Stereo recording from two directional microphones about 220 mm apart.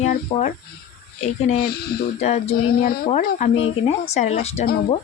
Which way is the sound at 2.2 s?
30° left (ahead or behind).